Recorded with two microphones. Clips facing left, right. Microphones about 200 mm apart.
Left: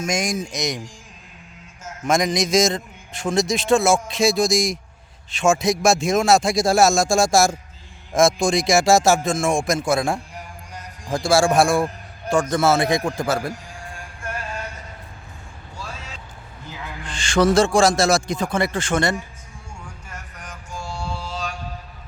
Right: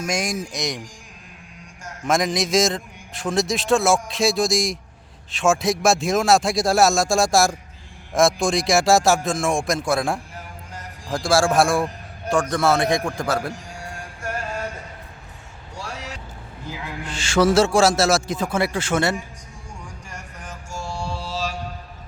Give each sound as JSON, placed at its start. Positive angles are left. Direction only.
{"t": 0.0, "sound": "a man's voice", "side_deg": 0}
{"t": 1.8, "sound": "a man's voice", "side_deg": 0}
{"t": 15.7, "sound": "a sound", "side_deg": -75}
{"t": 16.8, "sound": "a man's voice", "side_deg": -5}
{"t": 21.2, "sound": "mantra", "side_deg": 0}